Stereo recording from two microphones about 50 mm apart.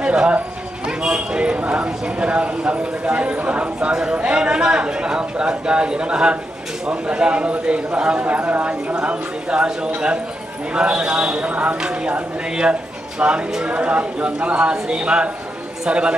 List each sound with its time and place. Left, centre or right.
0.0 s a man's voice: centre